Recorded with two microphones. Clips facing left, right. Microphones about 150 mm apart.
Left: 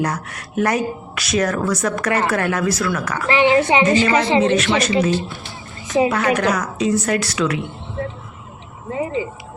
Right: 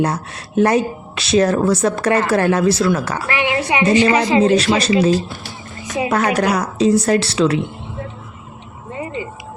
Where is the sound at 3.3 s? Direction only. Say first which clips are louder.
Left 6 dB; 30° left (ahead or behind).